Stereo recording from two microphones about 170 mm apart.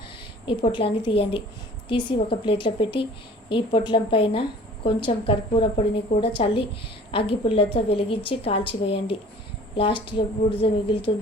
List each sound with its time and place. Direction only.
0.4 s a woman's voice: 30° left (ahead or behind)